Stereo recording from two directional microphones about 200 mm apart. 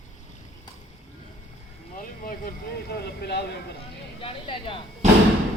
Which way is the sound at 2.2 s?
45° left (ahead or behind).